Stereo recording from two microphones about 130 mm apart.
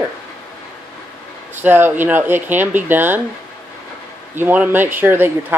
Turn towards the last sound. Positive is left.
turn(degrees=-15)  # may be behind; listen again after turning